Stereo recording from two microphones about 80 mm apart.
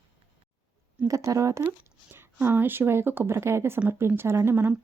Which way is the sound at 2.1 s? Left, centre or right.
Right.